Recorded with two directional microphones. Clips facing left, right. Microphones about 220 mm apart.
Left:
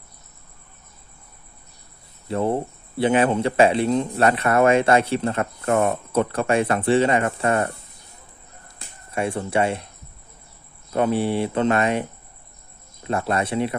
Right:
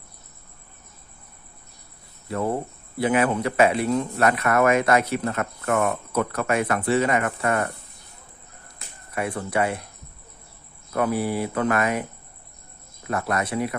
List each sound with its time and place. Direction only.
2.2 s cricket: 25° left (ahead or behind)
3.0 s speech: 30° left (ahead or behind)
9.1 s speech: 25° left (ahead or behind)
10.9 s speech: 25° left (ahead or behind)